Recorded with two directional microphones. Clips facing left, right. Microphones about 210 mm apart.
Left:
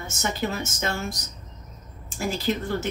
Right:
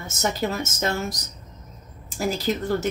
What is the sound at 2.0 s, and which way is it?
Speech, 40° right (ahead or behind).